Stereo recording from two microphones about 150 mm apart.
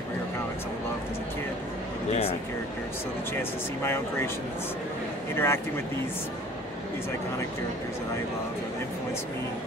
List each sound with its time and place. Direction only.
3.3 s speech: 15° left (ahead or behind)
5.3 s speech: 15° left (ahead or behind)